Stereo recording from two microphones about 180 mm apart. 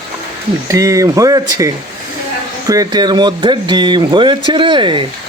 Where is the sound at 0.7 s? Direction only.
20° right (ahead or behind).